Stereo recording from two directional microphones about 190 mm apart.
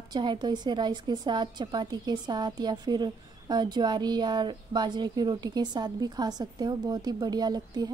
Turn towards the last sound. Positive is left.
turn(degrees=-20)  # may be behind; listen again after turning